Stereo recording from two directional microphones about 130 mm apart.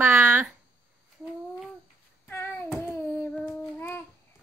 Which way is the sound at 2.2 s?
15° left (ahead or behind).